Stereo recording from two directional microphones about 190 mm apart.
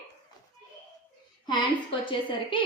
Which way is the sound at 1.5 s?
25° left (ahead or behind).